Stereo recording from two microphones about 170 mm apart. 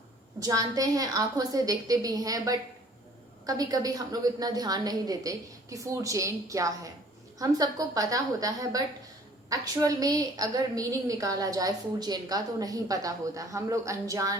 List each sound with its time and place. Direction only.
0.4 s a woman's voice: 20° right (ahead or behind)